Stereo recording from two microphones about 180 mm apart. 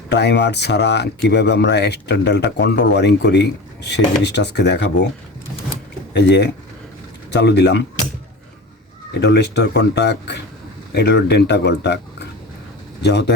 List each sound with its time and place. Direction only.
0.1 s speech: 70° left (ahead or behind)
6.1 s speech: 70° left (ahead or behind)
9.2 s speech: 70° left (ahead or behind)
13.0 s speech: 70° left (ahead or behind)